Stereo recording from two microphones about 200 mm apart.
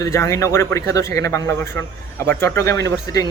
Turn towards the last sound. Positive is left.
turn(degrees=15)  # may be behind; listen again after turning